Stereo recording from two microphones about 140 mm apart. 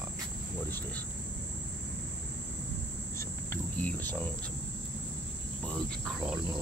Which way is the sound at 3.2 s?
15° left (ahead or behind).